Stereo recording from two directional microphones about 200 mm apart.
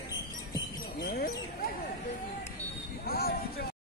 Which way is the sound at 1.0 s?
50° left (ahead or behind).